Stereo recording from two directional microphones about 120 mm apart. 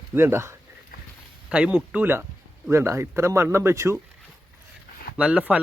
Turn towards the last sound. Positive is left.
turn(degrees=-10)  # may be behind; listen again after turning